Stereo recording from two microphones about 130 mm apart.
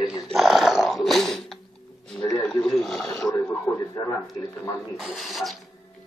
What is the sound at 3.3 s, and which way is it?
Speech, 30° left (ahead or behind).